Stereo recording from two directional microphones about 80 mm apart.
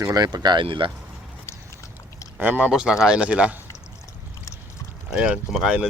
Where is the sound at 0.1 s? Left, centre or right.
Right.